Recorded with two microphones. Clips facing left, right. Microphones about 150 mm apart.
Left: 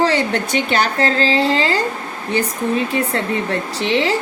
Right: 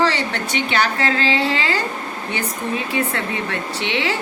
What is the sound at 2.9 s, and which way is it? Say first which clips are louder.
A woman's voice: left 3 dB; 35° left (ahead or behind).